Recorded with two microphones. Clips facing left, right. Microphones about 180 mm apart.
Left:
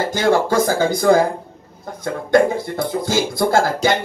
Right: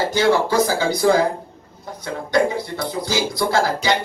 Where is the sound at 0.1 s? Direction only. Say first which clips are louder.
Left 2 dB; 50° left (ahead or behind).